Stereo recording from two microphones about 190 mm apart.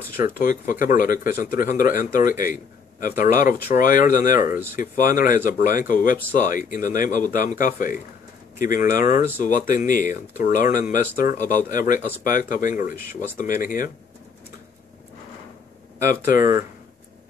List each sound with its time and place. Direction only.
0.2 s speech: 45° left (ahead or behind)
16.3 s speech: 45° left (ahead or behind)